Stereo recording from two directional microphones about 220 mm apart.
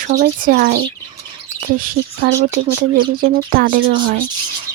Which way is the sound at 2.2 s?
45° right (ahead or behind).